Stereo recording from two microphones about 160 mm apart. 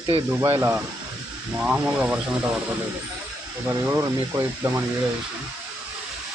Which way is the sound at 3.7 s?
15° right (ahead or behind).